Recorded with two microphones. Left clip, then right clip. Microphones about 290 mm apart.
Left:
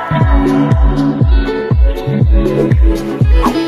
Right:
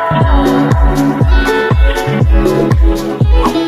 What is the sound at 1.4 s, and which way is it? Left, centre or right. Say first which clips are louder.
Music: right 6 dB; right.